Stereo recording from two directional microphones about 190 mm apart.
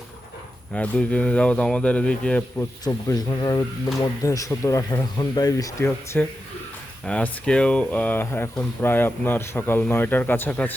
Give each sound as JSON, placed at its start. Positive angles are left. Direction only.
{"t": 0.7, "sound": "speech", "side_deg": 5}
{"t": 2.8, "sound": "speech", "side_deg": 20}
{"t": 7.0, "sound": "speech", "side_deg": 5}